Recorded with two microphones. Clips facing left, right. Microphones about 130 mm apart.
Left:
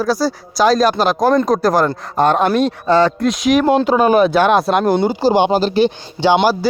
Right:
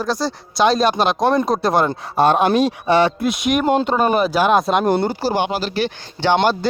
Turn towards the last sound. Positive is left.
turn(degrees=15)  # may be behind; listen again after turning